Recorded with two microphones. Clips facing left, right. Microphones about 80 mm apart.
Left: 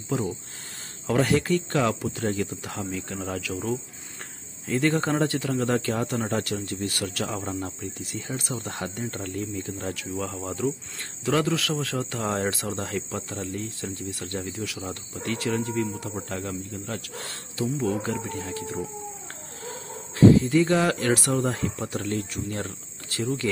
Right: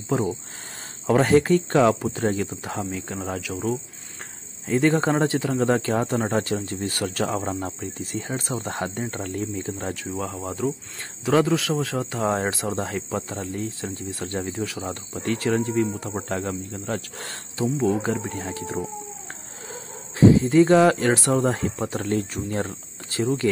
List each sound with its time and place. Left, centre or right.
1.0 s a man's voice: right
10.2 s a man's voice: centre
14.6 s speech: right
17.8 s a man's voice: right
22.4 s speech: right